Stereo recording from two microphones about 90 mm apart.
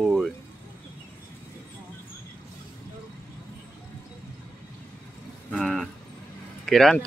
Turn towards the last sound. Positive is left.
turn(degrees=5)  # may be behind; listen again after turning